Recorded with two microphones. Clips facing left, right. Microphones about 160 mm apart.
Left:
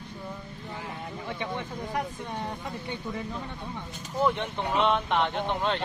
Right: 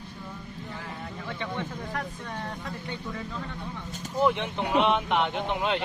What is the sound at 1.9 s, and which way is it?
Speech, 15° left (ahead or behind).